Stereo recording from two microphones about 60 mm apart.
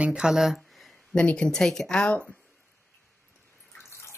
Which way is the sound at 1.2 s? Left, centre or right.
Centre.